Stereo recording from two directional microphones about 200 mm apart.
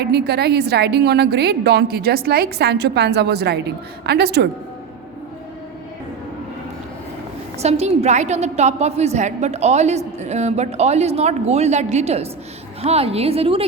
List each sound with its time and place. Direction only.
0.0 s a woman's voice: 55° right (ahead or behind)
7.6 s a woman's voice: 30° right (ahead or behind)